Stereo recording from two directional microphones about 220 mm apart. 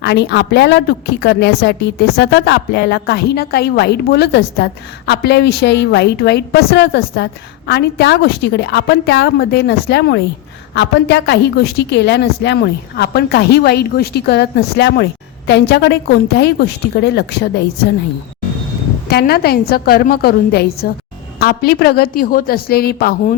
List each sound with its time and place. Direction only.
0.0 s a woman's voice: 50° left (ahead or behind)
19.0 s a woman's voice: 45° left (ahead or behind)